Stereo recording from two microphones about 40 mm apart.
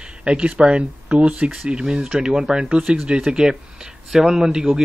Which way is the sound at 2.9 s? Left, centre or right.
Right.